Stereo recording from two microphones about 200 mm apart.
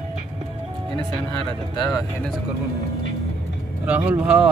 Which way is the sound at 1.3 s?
20° left (ahead or behind).